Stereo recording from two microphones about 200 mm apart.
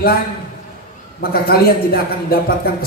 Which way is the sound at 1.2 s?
50° left (ahead or behind).